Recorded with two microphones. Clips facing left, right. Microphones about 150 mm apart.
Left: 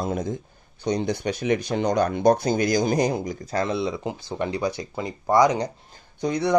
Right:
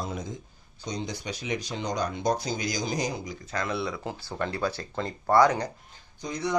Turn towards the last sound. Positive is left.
turn(degrees=65)  # may be behind; listen again after turning